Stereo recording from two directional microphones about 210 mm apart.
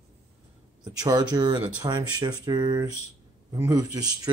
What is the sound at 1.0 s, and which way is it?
Speech, 20° right (ahead or behind).